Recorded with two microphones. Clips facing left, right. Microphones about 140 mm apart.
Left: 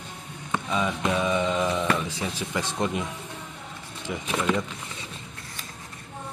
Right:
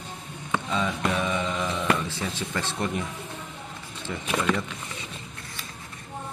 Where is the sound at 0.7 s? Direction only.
15° left (ahead or behind).